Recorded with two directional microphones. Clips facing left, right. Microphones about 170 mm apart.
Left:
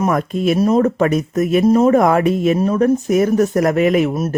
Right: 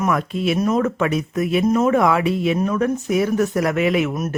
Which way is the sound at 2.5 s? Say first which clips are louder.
Left 5 dB; 30° left (ahead or behind).